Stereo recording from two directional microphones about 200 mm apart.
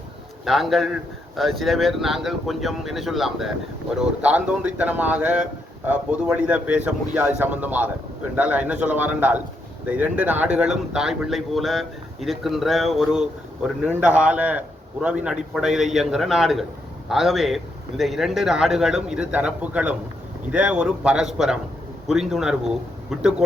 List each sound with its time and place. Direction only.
0.4 s speech: centre (ahead or behind)